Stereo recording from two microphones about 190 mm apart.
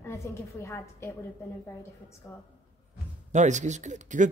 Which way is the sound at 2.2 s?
10° left (ahead or behind).